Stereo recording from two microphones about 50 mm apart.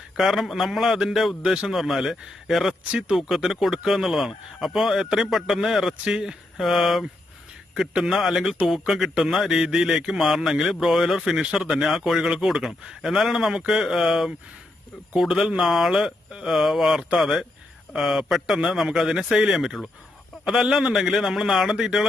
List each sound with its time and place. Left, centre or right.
0.2 s speech: centre
6.1 s speech: centre
6.6 s speech: centre
8.2 s speech: centre
15.5 s speech: centre